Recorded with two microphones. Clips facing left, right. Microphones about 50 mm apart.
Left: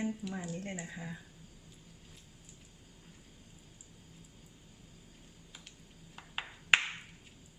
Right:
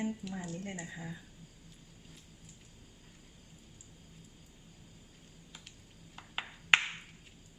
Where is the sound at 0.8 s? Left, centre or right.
Left.